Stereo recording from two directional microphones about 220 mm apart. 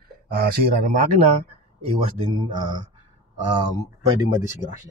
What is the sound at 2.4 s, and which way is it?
Speech, 20° right (ahead or behind).